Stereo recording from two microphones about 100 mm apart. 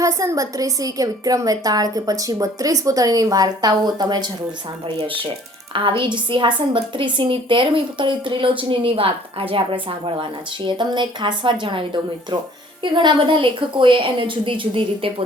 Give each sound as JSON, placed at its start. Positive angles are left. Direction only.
{"t": 0.0, "sound": "a woman's voice", "side_deg": -35}
{"t": 6.0, "sound": "a woman's voice", "side_deg": -55}
{"t": 10.7, "sound": "a woman's voice", "side_deg": -50}